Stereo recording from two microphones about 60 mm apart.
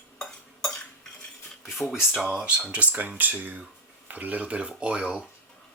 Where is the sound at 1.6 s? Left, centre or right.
Centre.